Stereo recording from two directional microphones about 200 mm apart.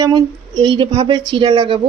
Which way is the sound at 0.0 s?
20° right (ahead or behind).